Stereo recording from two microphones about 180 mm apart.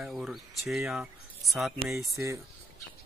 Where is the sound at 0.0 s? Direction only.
5° right (ahead or behind).